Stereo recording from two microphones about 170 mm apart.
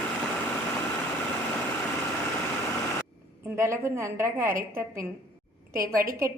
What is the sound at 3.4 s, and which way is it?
A woman's voice, 15° right (ahead or behind).